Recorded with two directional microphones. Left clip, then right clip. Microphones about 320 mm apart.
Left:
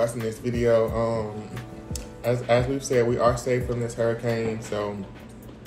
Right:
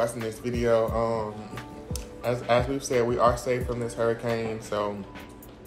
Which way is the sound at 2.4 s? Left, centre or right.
Centre.